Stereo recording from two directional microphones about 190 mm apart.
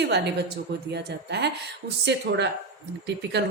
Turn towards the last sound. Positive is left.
turn(degrees=-65)  # may be behind; listen again after turning